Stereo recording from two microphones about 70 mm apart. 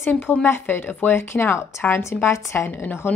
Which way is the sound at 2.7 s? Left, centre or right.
Left.